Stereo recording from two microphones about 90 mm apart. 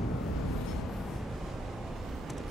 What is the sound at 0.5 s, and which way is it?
Train, centre (ahead or behind).